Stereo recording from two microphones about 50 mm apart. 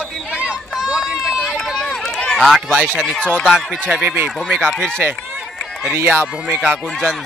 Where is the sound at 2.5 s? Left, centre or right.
Centre.